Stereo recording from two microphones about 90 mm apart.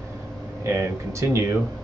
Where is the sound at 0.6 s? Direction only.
30° right (ahead or behind).